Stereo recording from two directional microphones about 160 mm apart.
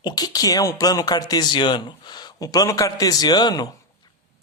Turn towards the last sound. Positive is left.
turn(degrees=25)  # may be behind; listen again after turning